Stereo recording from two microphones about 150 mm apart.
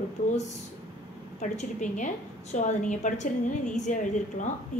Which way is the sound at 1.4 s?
50° left (ahead or behind).